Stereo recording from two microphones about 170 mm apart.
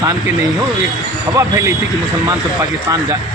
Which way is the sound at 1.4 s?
15° right (ahead or behind).